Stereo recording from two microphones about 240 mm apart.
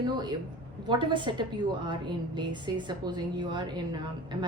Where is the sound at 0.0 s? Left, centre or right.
Centre.